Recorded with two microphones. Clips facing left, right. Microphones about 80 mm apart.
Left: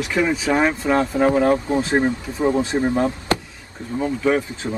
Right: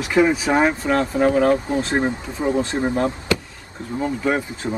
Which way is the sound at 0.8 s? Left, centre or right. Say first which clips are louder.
Left 1 dB; centre.